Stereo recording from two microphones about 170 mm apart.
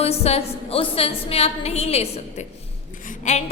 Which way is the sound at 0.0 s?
35° left (ahead or behind).